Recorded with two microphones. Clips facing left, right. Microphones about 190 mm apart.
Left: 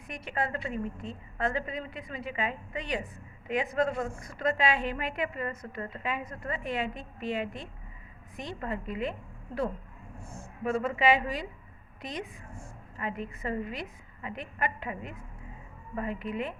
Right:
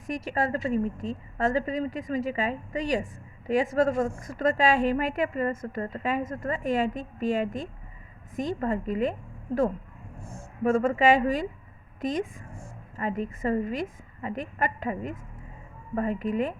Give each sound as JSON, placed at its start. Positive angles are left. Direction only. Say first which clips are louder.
{"t": 0.1, "sound": "a woman's voice", "louder": "right 6 dB", "side_deg": -40}
{"t": 10.6, "sound": "a woman's voice", "louder": "right 6 dB", "side_deg": -50}